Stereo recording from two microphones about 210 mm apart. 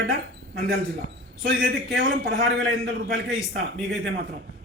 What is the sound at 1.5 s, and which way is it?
A man's voice, 60° right (ahead or behind).